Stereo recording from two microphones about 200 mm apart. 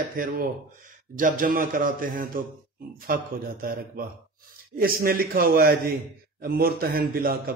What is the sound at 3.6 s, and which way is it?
A man's voice, 45° right (ahead or behind).